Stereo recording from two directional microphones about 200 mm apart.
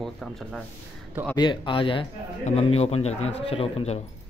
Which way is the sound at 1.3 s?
25° left (ahead or behind).